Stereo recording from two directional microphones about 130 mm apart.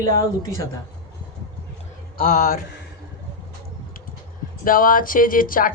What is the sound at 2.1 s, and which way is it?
Speech, 90° left.